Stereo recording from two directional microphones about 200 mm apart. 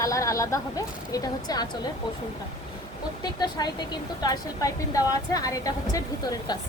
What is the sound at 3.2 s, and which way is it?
A woman's voice, 20° left (ahead or behind).